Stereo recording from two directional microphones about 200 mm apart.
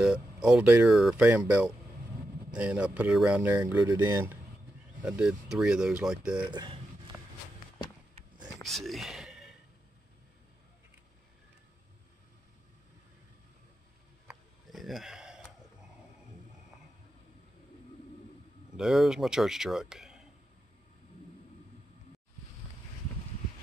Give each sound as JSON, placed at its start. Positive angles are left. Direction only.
{"t": 0.0, "sound": "speech", "side_deg": -5}
{"t": 6.4, "sound": "speech", "side_deg": -20}
{"t": 8.6, "sound": "whispering", "side_deg": 0}
{"t": 14.2, "sound": "a sound", "side_deg": 0}
{"t": 18.8, "sound": "speech", "side_deg": 0}